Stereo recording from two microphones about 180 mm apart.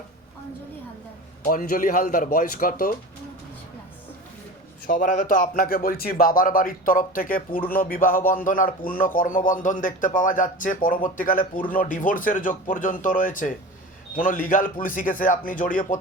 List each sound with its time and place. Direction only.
1.5 s a man's voice: 50° left (ahead or behind)
4.9 s a man's voice: 45° left (ahead or behind)